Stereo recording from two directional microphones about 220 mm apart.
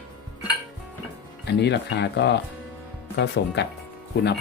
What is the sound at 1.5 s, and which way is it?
Speech, 50° left (ahead or behind).